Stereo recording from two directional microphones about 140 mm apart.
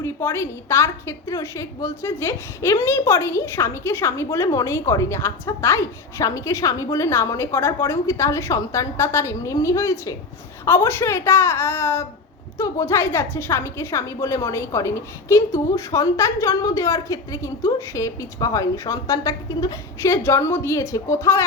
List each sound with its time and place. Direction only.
0.0 s a woman's voice: 15° left (ahead or behind)